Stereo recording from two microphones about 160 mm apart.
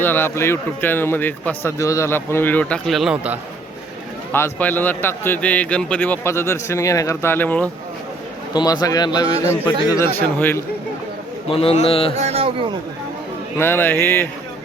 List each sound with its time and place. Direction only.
0.0 s a man's voice: 15° left (ahead or behind); by 3.3 s 5° right (ahead or behind)
4.3 s a man's voice: 15° left (ahead or behind)
8.5 s a man's voice: 25° left (ahead or behind)
9.4 s a man's voice: 15° left (ahead or behind)
11.4 s a man's voice: 35° left (ahead or behind)
12.1 s speech: 40° right (ahead or behind)
13.6 s a man's voice: 15° left (ahead or behind)